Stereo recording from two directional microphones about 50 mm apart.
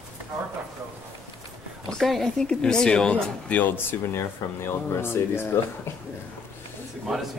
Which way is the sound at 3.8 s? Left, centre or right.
Left.